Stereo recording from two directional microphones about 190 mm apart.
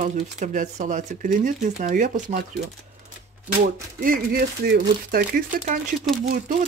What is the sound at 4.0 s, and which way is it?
Speech, 50° right (ahead or behind).